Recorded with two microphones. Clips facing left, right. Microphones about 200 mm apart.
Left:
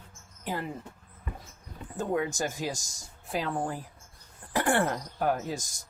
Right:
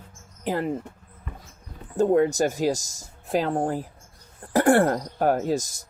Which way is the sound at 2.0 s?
45° right (ahead or behind).